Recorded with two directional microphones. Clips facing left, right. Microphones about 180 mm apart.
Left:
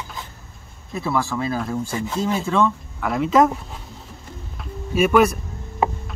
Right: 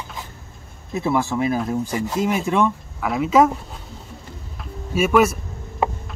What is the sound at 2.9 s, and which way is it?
Speech, 5° right (ahead or behind).